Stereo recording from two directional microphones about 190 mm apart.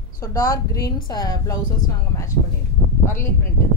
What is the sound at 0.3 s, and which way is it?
A woman's voice, 20° left (ahead or behind).